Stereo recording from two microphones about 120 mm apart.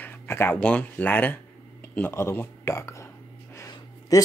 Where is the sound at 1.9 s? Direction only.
20° left (ahead or behind).